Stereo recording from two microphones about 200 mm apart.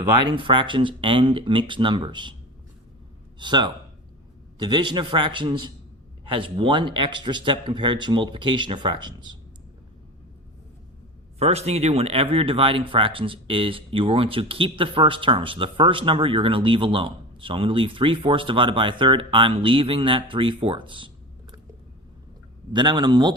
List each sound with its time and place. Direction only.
0.2 s speech: 25° right (ahead or behind)
3.3 s a man's voice: 20° right (ahead or behind)
11.3 s speech: 30° right (ahead or behind)
22.7 s speech: 20° right (ahead or behind)